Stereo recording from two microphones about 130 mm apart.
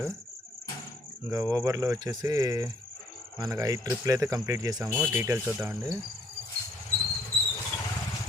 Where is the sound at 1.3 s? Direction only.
25° right (ahead or behind).